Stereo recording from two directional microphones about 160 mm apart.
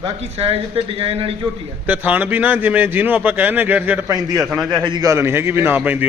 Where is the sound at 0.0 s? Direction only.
40° right (ahead or behind).